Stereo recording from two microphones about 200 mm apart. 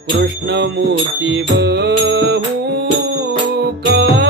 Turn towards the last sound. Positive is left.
turn(degrees=-55)  # may be behind; listen again after turning